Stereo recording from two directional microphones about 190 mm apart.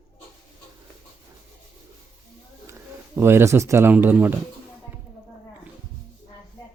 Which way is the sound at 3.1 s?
15° right (ahead or behind).